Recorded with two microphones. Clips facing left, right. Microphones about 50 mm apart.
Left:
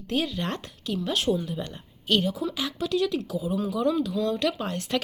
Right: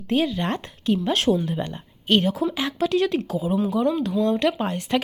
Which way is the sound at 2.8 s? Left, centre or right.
Right.